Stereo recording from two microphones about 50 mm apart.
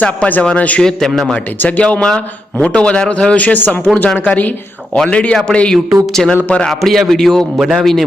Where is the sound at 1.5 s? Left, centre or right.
Left.